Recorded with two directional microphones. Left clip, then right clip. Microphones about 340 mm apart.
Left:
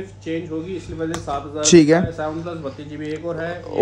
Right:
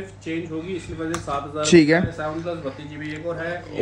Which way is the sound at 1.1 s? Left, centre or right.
Left.